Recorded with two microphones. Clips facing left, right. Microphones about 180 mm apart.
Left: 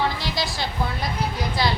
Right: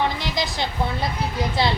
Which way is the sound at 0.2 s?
20° right (ahead or behind).